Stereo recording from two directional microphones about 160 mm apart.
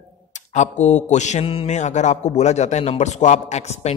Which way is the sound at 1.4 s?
35° left (ahead or behind).